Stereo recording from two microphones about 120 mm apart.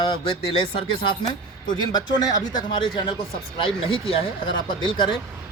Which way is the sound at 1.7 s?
35° left (ahead or behind).